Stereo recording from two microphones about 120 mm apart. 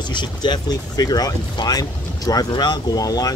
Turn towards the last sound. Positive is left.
turn(degrees=30)  # may be behind; listen again after turning